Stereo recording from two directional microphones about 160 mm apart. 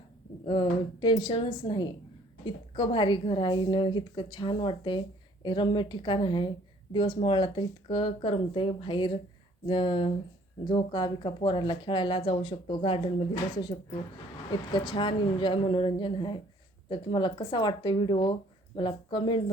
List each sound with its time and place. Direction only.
0.4 s a woman's voice: 30° left (ahead or behind)